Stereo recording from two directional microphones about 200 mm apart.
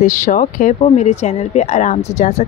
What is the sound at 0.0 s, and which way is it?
Speech, 40° left (ahead or behind).